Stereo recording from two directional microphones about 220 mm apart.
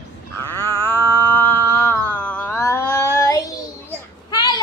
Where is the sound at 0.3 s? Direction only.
10° left (ahead or behind).